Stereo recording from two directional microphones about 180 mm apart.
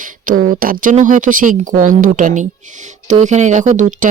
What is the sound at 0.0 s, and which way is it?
Speech, 50° right (ahead or behind).